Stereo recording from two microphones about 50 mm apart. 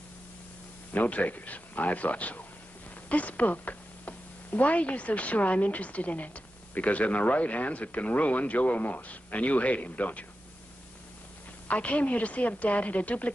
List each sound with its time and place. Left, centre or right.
0.9 s speech: left
11.6 s a woman's voice: left